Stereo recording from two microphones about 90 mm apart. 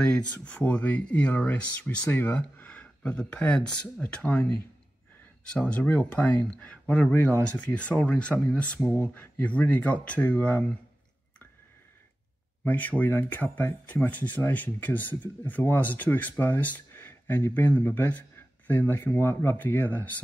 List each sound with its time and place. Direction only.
0.0 s speech: 15° left (ahead or behind)
12.6 s speech: 15° left (ahead or behind)